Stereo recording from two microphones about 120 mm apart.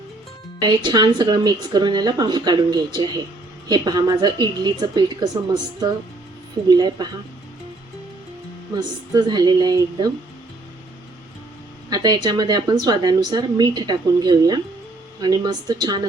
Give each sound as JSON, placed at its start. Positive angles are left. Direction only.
{"t": 0.6, "sound": "a woman's voice", "side_deg": -40}
{"t": 6.7, "sound": "a woman's voice", "side_deg": -35}
{"t": 9.1, "sound": "a woman's voice", "side_deg": -35}
{"t": 11.9, "sound": "a woman's voice", "side_deg": -35}